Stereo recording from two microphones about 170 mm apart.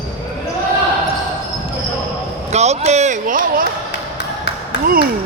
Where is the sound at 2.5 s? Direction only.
40° right (ahead or behind).